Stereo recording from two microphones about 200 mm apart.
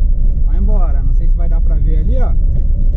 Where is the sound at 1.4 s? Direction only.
30° left (ahead or behind).